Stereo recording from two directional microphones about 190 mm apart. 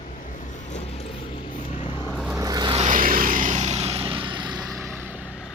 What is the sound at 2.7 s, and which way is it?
Vehicle, 40° right (ahead or behind).